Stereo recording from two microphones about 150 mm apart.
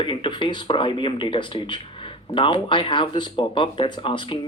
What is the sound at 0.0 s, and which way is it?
Speech, 35° left (ahead or behind).